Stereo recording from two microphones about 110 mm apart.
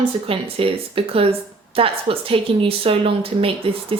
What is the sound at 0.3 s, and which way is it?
A woman's voice, 60° right (ahead or behind).